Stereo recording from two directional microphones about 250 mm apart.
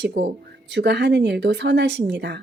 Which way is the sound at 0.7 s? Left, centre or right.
Right.